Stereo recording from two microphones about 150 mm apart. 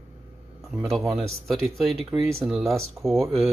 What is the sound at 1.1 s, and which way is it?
Speech, 40° right (ahead or behind).